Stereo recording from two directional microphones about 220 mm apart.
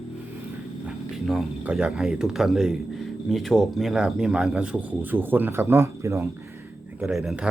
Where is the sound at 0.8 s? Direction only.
5° right (ahead or behind).